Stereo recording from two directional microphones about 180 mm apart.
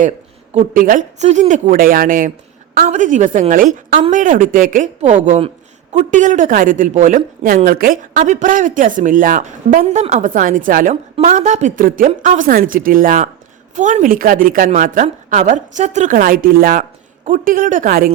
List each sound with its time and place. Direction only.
0.5 s a woman's voice: 50° right (ahead or behind)
8.1 s a woman's voice: 40° right (ahead or behind)